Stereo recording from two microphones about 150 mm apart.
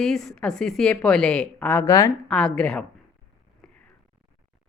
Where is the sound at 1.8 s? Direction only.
20° left (ahead or behind).